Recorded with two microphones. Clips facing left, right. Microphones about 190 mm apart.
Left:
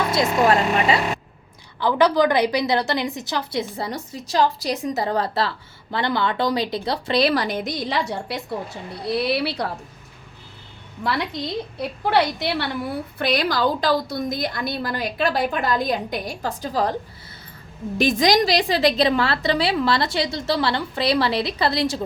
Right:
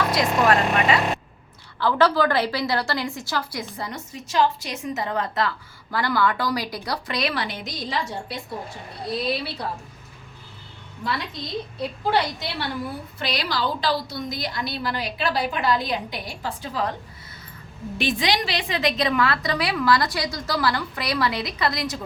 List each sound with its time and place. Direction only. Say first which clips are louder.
0.1 s a woman's voice: left 3 dB; 25° left (ahead or behind); by 9.6 s 70° left (ahead or behind)
11.8 s a woman's voice: left 3 dB; 65° left (ahead or behind)
13.1 s a woman's voice: left 6 dB; 50° left (ahead or behind)
17.9 s a woman's voice: left 6 dB; 40° left (ahead or behind)